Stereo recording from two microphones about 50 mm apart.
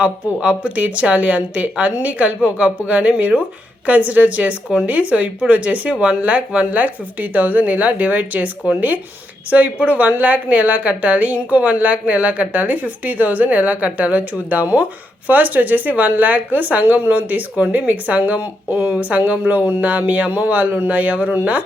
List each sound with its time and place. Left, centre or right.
0.0 s a woman's voice: right